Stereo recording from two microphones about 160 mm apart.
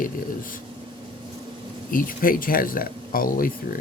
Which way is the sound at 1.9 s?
60° left (ahead or behind).